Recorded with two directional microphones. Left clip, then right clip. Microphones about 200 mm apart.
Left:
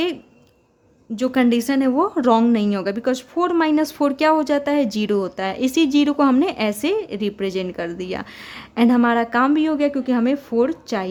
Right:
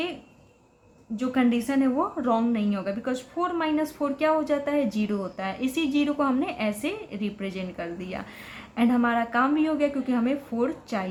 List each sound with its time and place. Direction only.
1.1 s a woman's voice: 50° left (ahead or behind)